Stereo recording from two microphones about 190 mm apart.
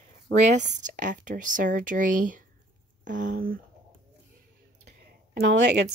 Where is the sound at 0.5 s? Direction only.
40° right (ahead or behind).